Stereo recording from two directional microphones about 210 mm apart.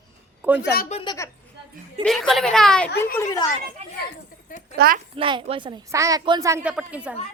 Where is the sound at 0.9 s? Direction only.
30° left (ahead or behind).